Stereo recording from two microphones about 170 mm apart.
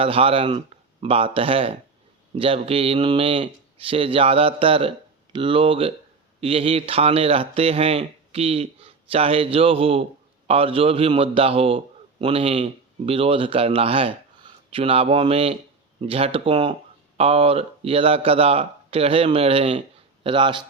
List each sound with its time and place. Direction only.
0.0 s speech: 35° right (ahead or behind)